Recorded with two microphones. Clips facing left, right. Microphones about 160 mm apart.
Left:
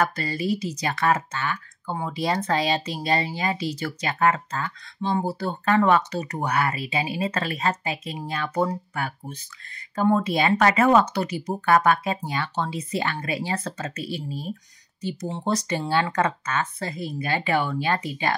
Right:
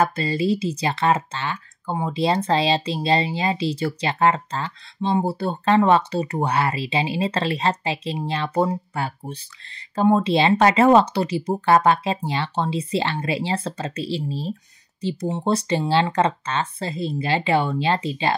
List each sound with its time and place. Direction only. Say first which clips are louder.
0.0 s speech: right 4 dB; 25° right (ahead or behind)